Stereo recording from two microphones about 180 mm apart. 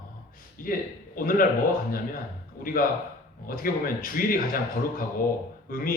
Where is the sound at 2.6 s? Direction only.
50° left (ahead or behind).